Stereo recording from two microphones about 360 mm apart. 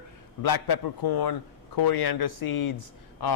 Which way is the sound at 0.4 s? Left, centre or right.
Left.